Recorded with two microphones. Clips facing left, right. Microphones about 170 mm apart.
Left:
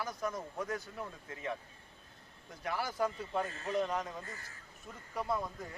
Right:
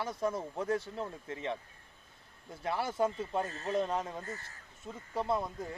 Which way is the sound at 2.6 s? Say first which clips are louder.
Right 3 dB; 25° right (ahead or behind).